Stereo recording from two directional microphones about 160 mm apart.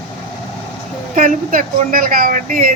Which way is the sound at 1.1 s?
60° right (ahead or behind).